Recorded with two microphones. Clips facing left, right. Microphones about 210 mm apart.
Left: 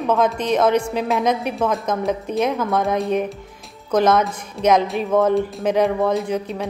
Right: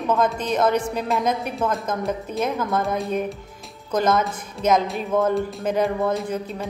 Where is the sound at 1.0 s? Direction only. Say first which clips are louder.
Left 3 dB; centre (ahead or behind).